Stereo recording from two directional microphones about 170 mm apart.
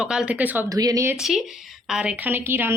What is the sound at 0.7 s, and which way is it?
Speech, 20° right (ahead or behind).